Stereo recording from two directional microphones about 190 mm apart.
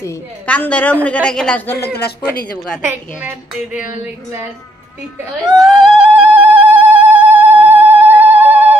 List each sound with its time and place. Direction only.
0.0 s a woman's voice: 10° left (ahead or behind)
2.0 s speech: 55° left (ahead or behind)
2.8 s a woman's voice: 10° right (ahead or behind)
5.6 s a sound: centre (ahead or behind)